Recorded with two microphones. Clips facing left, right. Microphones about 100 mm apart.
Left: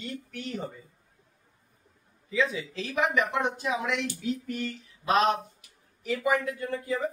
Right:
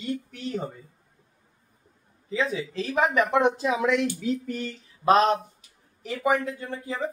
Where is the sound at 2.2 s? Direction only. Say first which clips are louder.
Right 1 dB; 35° right (ahead or behind).